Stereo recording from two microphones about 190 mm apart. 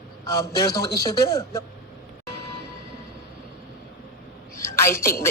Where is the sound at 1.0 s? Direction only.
15° left (ahead or behind).